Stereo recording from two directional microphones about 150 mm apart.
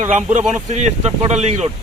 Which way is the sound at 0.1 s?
50° right (ahead or behind).